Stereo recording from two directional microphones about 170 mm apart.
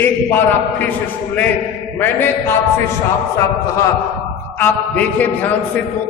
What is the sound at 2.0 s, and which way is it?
Speech, 10° left (ahead or behind).